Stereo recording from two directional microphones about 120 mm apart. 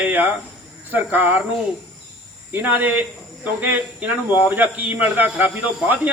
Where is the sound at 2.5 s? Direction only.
15° right (ahead or behind).